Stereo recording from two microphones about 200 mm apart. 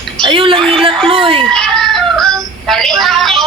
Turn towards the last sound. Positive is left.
turn(degrees=0)  # may be behind; listen again after turning